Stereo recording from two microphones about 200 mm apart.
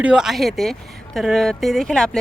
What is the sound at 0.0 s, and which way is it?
Speech, 5° right (ahead or behind).